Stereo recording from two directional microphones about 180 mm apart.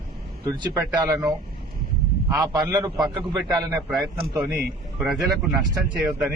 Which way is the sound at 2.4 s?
20° right (ahead or behind).